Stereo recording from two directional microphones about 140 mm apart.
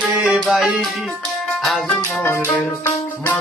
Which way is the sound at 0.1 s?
10° right (ahead or behind).